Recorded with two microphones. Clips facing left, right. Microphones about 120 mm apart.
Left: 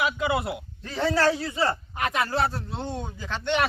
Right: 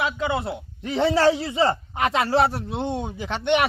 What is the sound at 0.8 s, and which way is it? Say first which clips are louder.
A man's voice: right 4 dB; 20° right (ahead or behind).